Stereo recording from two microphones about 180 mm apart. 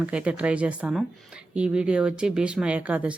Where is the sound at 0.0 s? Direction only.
5° right (ahead or behind).